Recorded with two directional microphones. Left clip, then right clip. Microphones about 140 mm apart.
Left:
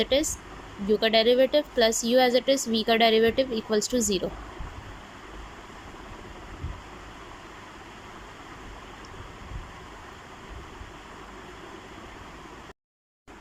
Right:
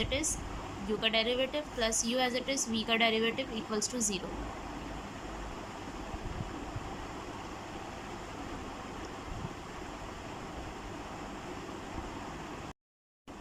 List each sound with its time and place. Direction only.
0.0 s a woman's voice: 30° left (ahead or behind)